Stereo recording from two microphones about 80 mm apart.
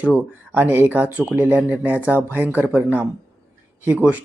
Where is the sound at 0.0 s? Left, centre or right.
Right.